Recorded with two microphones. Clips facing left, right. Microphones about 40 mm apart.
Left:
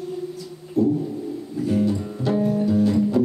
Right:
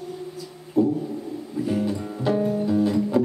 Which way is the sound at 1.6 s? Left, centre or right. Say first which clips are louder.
Left 3 dB; centre.